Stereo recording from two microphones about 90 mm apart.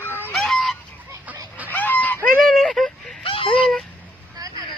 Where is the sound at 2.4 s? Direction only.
5° left (ahead or behind).